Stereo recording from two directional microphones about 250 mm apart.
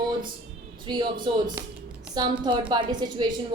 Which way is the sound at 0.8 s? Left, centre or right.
Centre.